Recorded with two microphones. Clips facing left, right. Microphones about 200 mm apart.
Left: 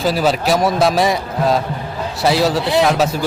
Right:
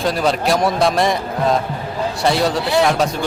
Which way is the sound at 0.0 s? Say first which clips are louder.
Left 1 dB; 5° left (ahead or behind).